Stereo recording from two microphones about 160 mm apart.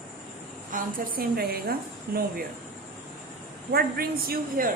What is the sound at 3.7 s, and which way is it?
Speech, 70° right (ahead or behind).